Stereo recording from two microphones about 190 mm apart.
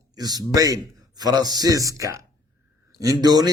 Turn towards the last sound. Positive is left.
turn(degrees=-20)  # may be behind; listen again after turning